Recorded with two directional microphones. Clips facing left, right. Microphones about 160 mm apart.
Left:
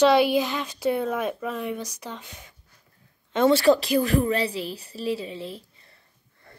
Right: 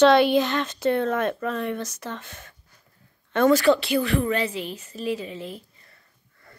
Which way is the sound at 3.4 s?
30° left (ahead or behind).